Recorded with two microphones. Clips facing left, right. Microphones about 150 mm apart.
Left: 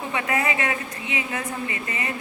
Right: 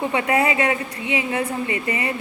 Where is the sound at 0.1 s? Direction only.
30° right (ahead or behind).